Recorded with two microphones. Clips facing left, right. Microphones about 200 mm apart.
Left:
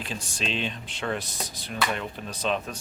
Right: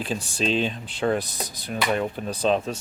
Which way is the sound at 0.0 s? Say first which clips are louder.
Right 7 dB; 40° right (ahead or behind).